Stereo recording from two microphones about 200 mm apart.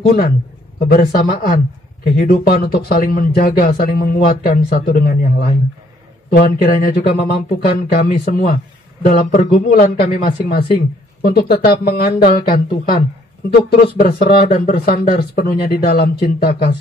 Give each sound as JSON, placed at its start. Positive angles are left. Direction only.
{"t": 0.0, "sound": "speech", "side_deg": 50}